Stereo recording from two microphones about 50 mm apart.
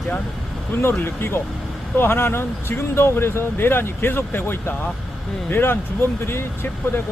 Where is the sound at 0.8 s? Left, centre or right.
Left.